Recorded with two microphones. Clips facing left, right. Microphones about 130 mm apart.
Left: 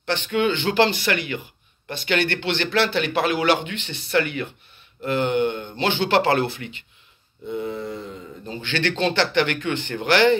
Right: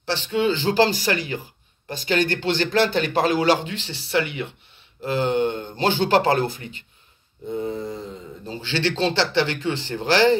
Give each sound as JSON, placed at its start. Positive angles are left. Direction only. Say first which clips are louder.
{"t": 0.1, "sound": "a man's voice", "louder": "even", "side_deg": -35}